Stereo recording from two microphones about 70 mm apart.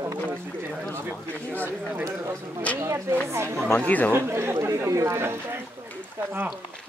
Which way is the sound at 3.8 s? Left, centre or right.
Left.